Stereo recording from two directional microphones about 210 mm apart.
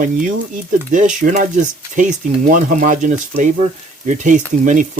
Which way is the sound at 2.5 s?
35° right (ahead or behind).